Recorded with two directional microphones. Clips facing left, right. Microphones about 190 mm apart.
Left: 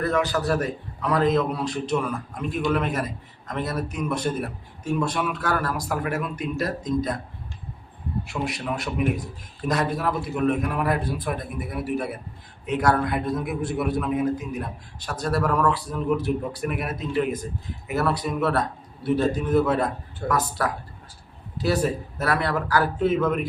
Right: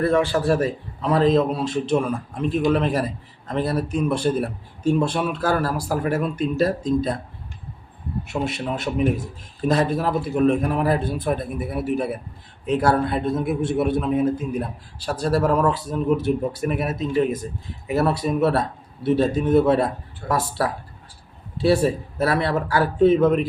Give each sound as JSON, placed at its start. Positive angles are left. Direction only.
{"t": 0.0, "sound": "a man's voice", "side_deg": -30}
{"t": 8.3, "sound": "a man's voice", "side_deg": -25}